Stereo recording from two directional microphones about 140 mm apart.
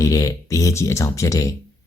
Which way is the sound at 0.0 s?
25° left (ahead or behind).